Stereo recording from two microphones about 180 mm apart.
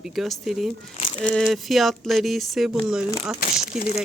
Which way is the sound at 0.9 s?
30° left (ahead or behind).